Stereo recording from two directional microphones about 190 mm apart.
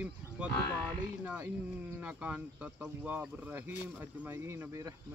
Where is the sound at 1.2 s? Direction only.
10° right (ahead or behind).